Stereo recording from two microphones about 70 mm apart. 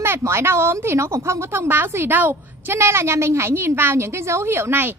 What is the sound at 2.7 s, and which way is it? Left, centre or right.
A woman's voice, right.